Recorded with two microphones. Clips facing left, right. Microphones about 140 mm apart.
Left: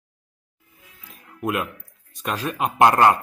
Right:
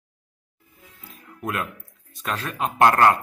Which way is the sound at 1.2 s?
15° left (ahead or behind).